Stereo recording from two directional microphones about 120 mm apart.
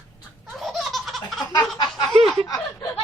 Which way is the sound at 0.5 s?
Centre (ahead or behind).